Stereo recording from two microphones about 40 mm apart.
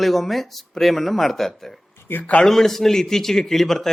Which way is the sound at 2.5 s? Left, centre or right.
Centre.